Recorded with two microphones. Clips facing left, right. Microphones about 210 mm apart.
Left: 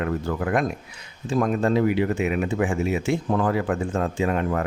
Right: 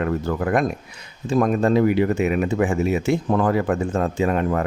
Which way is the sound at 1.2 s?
45° right (ahead or behind).